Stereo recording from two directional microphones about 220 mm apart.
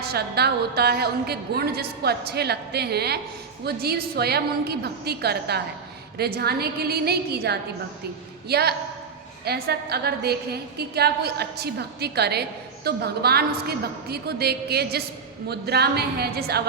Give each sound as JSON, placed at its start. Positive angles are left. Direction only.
{"t": 0.1, "sound": "a woman's voice", "side_deg": -45}